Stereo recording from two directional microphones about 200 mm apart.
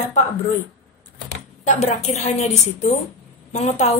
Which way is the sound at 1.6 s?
35° left (ahead or behind).